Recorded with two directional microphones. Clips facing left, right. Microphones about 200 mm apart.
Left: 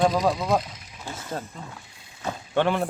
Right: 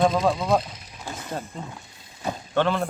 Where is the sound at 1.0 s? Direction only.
15° right (ahead or behind).